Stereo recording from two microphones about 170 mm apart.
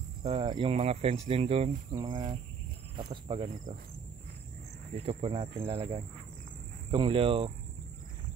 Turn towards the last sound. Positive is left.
turn(degrees=-35)  # may be behind; listen again after turning